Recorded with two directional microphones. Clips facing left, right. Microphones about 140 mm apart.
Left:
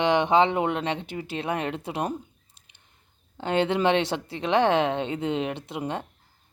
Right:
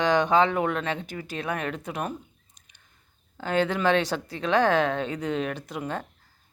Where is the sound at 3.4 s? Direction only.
25° left (ahead or behind).